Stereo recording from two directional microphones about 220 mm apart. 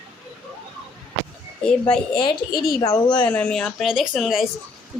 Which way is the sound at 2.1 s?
20° left (ahead or behind).